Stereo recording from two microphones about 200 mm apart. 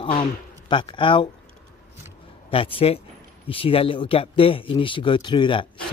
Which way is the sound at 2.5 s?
25° left (ahead or behind).